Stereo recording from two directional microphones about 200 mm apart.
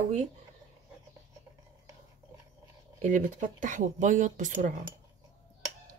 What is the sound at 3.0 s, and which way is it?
Speech, 40° right (ahead or behind).